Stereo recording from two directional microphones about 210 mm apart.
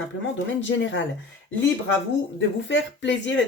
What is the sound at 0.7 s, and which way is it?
Speech, 60° left (ahead or behind).